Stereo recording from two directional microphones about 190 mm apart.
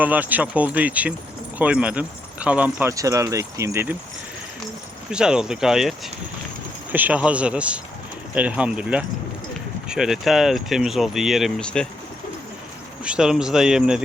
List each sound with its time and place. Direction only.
0.0 s speech: 10° right (ahead or behind)
5.1 s speech: 5° right (ahead or behind)
6.9 s speech: 10° right (ahead or behind)
13.1 s speech: 5° right (ahead or behind)